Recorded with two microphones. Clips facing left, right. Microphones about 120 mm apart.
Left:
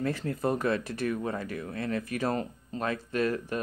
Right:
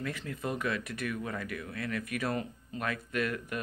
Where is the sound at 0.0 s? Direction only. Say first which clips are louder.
Left 7 dB; 35° left (ahead or behind).